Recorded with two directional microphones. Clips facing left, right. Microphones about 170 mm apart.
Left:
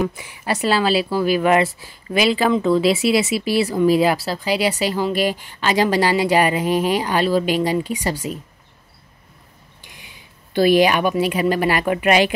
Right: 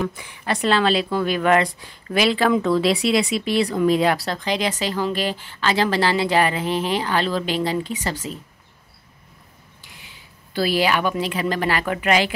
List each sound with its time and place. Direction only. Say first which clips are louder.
0.0 s speech: left 3 dB; 10° left (ahead or behind)
9.8 s speech: left 2 dB; 15° left (ahead or behind)